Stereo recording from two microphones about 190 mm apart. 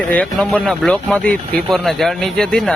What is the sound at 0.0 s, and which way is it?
Speech, 5° left (ahead or behind).